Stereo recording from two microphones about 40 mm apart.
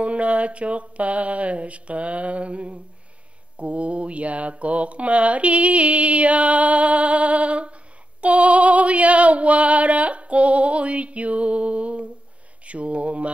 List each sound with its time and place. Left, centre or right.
0.0 s mantra: right